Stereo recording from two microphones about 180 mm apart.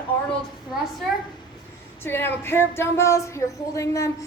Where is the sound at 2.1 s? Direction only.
10° left (ahead or behind).